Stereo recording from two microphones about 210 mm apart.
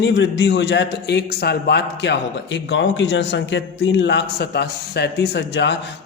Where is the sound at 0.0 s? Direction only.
60° left (ahead or behind).